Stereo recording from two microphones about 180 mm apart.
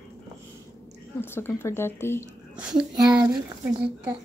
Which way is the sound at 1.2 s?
15° left (ahead or behind).